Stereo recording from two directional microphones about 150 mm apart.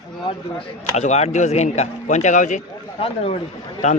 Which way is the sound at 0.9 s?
50° left (ahead or behind).